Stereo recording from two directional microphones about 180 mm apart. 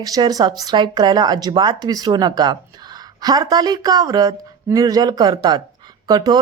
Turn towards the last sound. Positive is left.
turn(degrees=-20)  # may be behind; listen again after turning